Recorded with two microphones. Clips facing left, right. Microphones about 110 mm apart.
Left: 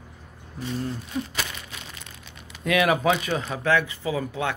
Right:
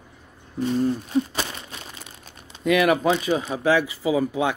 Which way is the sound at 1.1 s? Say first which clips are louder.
Right 6 dB; 35° right (ahead or behind).